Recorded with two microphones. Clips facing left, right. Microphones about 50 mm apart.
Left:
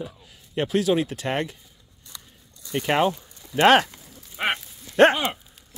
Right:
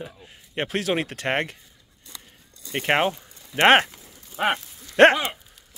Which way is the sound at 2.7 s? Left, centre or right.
Right.